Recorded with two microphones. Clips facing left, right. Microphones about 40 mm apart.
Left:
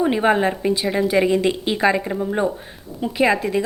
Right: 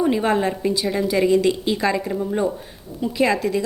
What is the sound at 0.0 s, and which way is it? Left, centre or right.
A woman's voice, left.